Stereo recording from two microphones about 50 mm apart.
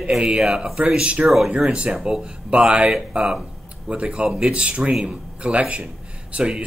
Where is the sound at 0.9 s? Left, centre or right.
Right.